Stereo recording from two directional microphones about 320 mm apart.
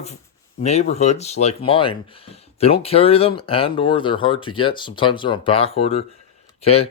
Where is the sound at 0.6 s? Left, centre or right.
Centre.